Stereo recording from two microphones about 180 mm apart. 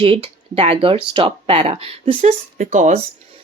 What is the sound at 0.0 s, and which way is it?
Speech, 30° right (ahead or behind).